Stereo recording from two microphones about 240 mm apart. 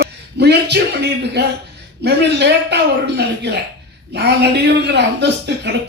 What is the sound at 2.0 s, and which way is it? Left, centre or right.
Speech, right.